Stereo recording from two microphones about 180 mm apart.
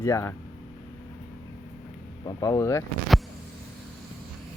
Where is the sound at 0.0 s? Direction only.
15° left (ahead or behind).